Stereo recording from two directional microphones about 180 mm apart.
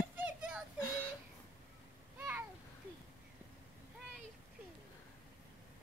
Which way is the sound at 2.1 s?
10° right (ahead or behind).